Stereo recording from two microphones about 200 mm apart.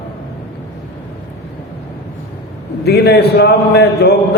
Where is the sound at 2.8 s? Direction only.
55° left (ahead or behind).